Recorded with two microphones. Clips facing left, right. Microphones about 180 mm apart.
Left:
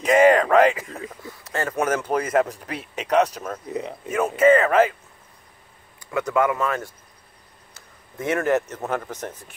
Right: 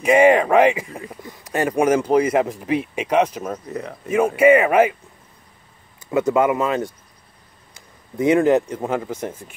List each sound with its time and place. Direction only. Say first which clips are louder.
0.0 s speech: right 2 dB; 10° right (ahead or behind)
5.9 s speech: right 4 dB; 20° right (ahead or behind)